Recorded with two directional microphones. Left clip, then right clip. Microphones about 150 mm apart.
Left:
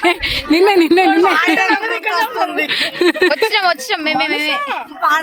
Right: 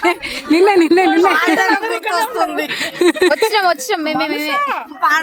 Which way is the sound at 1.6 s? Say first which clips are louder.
Even; 65° right (ahead or behind).